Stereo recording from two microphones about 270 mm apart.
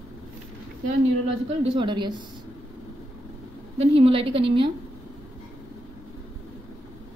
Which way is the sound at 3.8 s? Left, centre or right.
Right.